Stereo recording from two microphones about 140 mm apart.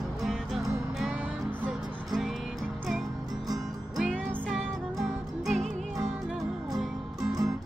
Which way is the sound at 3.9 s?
5° right (ahead or behind).